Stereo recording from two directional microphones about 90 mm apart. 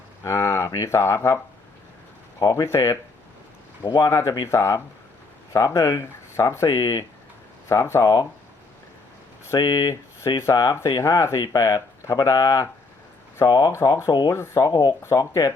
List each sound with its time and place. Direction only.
0.2 s speech: 30° left (ahead or behind)
2.4 s speech: 45° left (ahead or behind)
2.6 s speech: 30° left (ahead or behind)
4.1 s speech: 30° left (ahead or behind)
9.6 s speech: 35° left (ahead or behind)
13.7 s speech: 35° left (ahead or behind)
14.1 s speech: 50° left (ahead or behind)
14.3 s speech: 30° left (ahead or behind)
14.7 s speech: 50° left (ahead or behind)
15.1 s speech: 40° left (ahead or behind)